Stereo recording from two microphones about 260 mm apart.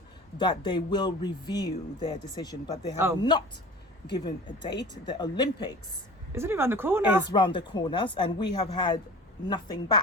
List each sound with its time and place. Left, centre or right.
0.3 s speech: centre
6.3 s speech: centre
7.3 s speech: centre